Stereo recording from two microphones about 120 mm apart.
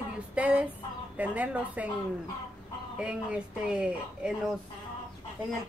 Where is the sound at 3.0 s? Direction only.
10° right (ahead or behind).